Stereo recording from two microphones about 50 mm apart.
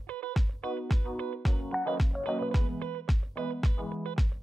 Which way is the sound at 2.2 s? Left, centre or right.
Left.